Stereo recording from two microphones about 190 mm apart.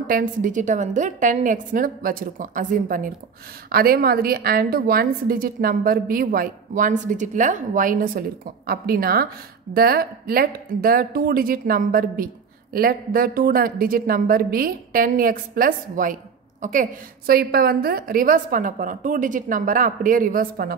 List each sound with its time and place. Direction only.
0.0 s a woman's voice: 45° right (ahead or behind)